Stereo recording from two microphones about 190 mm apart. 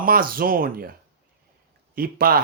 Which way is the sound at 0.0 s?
50° right (ahead or behind).